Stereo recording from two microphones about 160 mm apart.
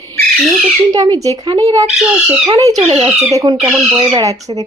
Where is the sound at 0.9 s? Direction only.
25° right (ahead or behind).